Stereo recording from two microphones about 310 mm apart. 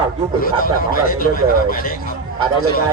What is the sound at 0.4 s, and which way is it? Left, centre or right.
A man's voice, left.